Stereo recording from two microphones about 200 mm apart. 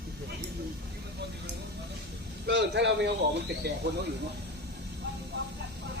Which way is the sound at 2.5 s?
60° right (ahead or behind).